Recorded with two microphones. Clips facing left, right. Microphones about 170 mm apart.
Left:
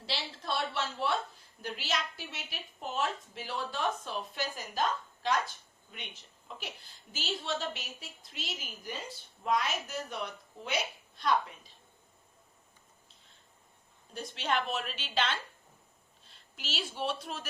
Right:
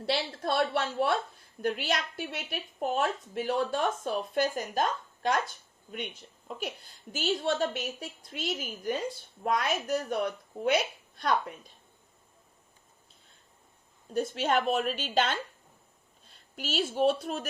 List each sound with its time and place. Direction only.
0.0 s a woman's voice: 55° right (ahead or behind)
7.1 s a woman's voice: 50° right (ahead or behind)
14.1 s a woman's voice: 45° right (ahead or behind)